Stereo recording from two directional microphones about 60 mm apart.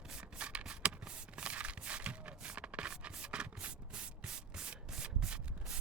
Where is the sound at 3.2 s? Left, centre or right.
Centre.